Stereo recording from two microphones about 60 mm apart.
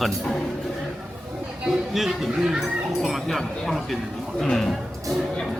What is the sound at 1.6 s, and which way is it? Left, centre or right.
A man's voice, centre.